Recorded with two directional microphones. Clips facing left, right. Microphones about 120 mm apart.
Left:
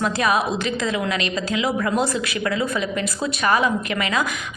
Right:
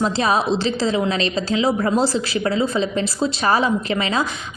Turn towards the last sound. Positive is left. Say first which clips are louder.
# right 2 dB
turn(degrees=-30)  # may be behind; listen again after turning